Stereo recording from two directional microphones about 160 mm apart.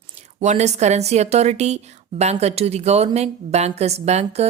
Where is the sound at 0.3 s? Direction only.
45° right (ahead or behind).